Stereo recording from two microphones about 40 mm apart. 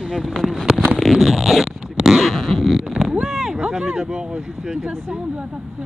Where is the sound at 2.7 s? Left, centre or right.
Centre.